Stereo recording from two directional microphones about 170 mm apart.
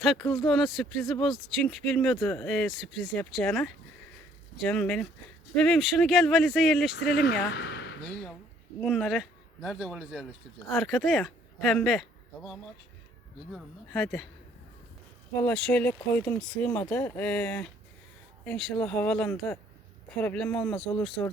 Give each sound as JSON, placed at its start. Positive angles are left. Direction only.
{"t": 0.3, "sound": "speech", "side_deg": 0}
{"t": 7.1, "sound": "speech", "side_deg": 75}
{"t": 8.8, "sound": "speech", "side_deg": 0}
{"t": 15.4, "sound": "speech", "side_deg": 5}